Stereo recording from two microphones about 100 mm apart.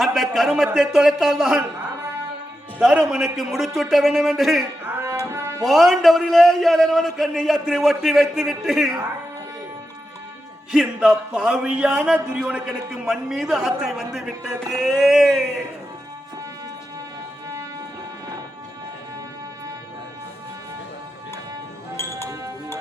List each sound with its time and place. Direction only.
0.0 s speech: centre (ahead or behind)
2.7 s speech: 10° right (ahead or behind)
5.2 s music: 25° right (ahead or behind)
5.6 s speech: centre (ahead or behind)
10.7 s speech: 5° right (ahead or behind)